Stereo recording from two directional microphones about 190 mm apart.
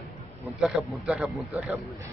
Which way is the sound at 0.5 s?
Centre (ahead or behind).